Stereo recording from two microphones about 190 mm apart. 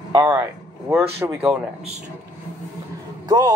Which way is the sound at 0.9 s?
5° right (ahead or behind).